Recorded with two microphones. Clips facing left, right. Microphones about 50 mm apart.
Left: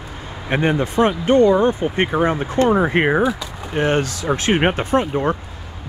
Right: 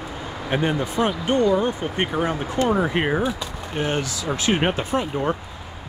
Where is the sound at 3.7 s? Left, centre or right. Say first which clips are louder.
Left 6 dB; left.